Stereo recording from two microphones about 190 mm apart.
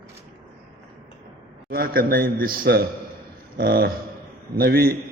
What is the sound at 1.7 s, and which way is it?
A man's voice, 50° right (ahead or behind).